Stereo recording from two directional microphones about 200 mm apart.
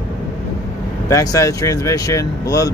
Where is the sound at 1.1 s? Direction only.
15° left (ahead or behind).